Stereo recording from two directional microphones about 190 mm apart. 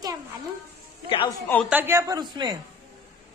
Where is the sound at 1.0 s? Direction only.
25° left (ahead or behind).